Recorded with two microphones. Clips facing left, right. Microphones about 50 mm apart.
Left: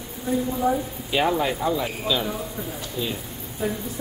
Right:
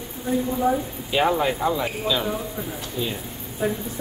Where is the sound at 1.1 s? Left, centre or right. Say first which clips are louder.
Right 1 dB; centre.